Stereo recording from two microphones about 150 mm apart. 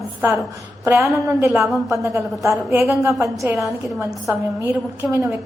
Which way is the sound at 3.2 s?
20° right (ahead or behind).